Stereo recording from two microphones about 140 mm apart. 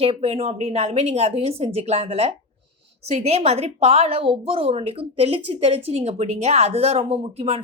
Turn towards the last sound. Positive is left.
turn(degrees=-45)  # may be behind; listen again after turning